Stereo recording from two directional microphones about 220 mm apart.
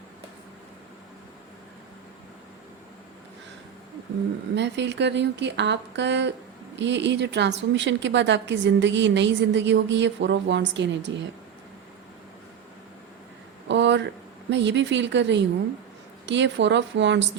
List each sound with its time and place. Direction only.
4.5 s a woman's voice: 55° right (ahead or behind)
13.7 s a sound: 55° right (ahead or behind)
14.5 s a woman's voice: 55° right (ahead or behind)